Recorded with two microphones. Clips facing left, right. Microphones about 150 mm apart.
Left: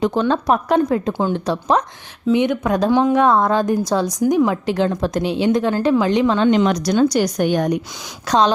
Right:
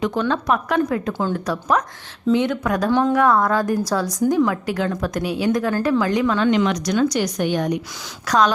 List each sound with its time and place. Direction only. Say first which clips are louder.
0.0 s a woman's voice: left 3 dB; 30° left (ahead or behind)
8.3 s a woman's voice: left 2 dB; 25° left (ahead or behind)